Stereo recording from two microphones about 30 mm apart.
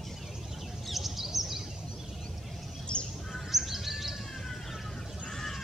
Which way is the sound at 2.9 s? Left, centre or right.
Left.